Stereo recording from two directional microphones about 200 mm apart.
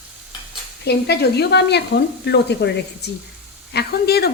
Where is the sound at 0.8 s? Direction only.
55° left (ahead or behind).